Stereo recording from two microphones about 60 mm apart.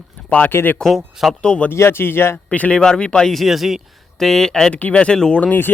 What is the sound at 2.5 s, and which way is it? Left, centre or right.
Speech, left.